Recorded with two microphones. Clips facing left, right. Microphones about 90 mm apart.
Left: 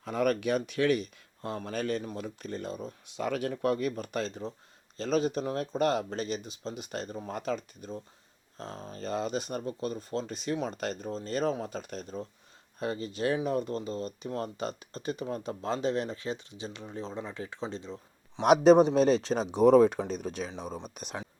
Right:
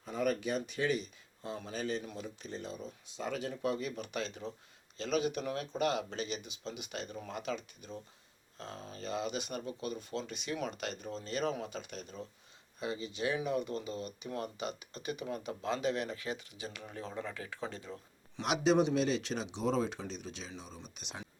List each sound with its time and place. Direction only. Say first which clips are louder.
0.0 s speech: left 5 dB; 65° left (ahead or behind); by 18.4 s 25° left (ahead or behind)
18.4 s speech: left 9 dB; 45° left (ahead or behind)
19.6 s speech: left 14 dB; 55° left (ahead or behind)